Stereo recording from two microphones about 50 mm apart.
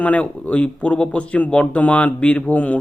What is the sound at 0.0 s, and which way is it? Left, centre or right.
Speech, left.